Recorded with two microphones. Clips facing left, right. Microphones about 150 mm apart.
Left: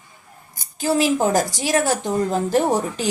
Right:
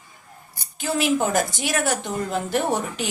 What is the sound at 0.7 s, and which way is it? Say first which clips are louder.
A woman's voice: left 3 dB; 35° left (ahead or behind).